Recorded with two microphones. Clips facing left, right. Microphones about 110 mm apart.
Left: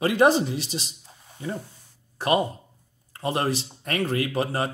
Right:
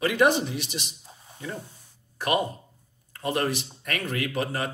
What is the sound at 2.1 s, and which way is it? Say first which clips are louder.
A man's voice: left 3 dB; 30° left (ahead or behind).